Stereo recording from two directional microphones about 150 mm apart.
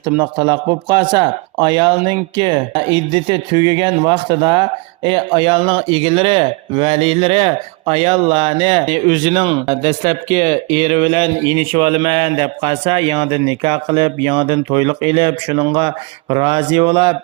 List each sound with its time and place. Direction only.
0.2 s speech: 30° right (ahead or behind)
9.6 s speech: 50° right (ahead or behind)